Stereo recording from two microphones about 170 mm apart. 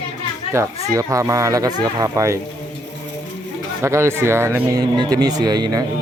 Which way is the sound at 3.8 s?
15° right (ahead or behind).